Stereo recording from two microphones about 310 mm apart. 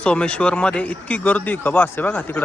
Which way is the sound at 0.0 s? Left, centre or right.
Centre.